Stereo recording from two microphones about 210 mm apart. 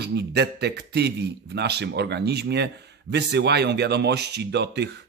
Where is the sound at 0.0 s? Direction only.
50° right (ahead or behind).